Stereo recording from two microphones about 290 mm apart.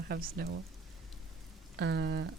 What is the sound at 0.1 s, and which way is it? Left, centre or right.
Speech, right.